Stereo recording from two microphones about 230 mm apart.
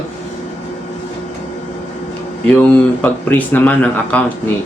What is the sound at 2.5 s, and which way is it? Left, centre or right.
Speech, centre.